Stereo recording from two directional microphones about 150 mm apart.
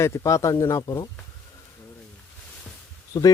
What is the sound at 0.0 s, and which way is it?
Speech, 20° left (ahead or behind).